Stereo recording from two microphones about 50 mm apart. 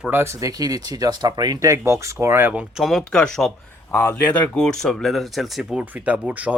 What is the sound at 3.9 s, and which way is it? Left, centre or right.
Speech, left.